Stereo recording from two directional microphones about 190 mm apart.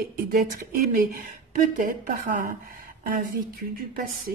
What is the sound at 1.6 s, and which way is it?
Speech, 45° right (ahead or behind).